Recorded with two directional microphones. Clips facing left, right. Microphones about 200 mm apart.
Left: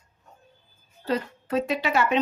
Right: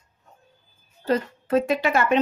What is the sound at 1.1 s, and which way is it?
Speech, 50° right (ahead or behind).